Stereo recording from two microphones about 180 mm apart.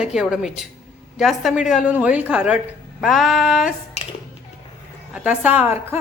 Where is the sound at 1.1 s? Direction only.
Centre (ahead or behind).